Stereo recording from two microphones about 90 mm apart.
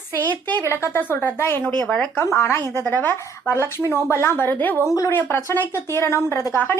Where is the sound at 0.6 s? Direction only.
30° right (ahead or behind).